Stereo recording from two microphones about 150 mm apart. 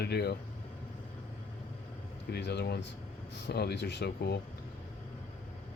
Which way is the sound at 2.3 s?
90° left.